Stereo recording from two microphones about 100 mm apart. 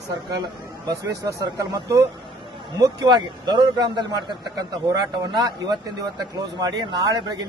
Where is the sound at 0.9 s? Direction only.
40° right (ahead or behind).